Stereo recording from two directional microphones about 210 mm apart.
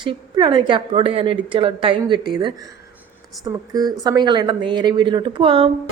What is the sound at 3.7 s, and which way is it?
A woman's voice, 20° right (ahead or behind).